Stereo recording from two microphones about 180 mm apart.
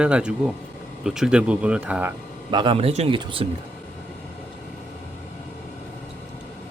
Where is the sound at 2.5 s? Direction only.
30° right (ahead or behind).